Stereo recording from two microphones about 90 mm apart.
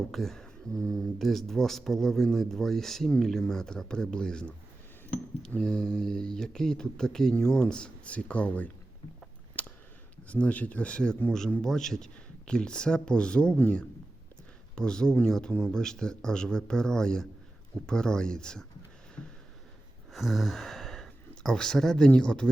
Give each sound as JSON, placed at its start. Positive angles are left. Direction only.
{"t": 0.1, "sound": "speech", "side_deg": 5}
{"t": 9.6, "sound": "a sound", "side_deg": 15}
{"t": 10.2, "sound": "speech", "side_deg": 15}
{"t": 20.1, "sound": "speech", "side_deg": 0}